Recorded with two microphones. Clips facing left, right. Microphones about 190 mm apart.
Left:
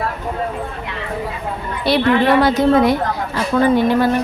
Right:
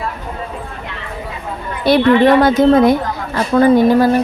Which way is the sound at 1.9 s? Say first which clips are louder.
Right 4 dB; 50° right (ahead or behind).